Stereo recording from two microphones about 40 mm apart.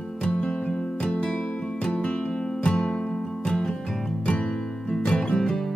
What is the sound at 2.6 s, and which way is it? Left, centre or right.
Music, left.